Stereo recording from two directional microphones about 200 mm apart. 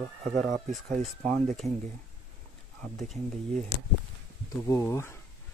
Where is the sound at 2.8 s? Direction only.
Centre (ahead or behind).